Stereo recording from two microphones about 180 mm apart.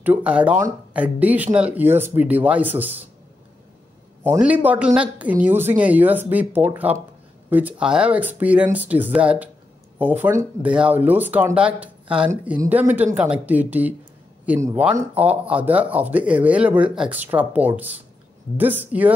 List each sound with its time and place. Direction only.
0.0 s speech: 10° right (ahead or behind)
4.2 s speech: 10° right (ahead or behind)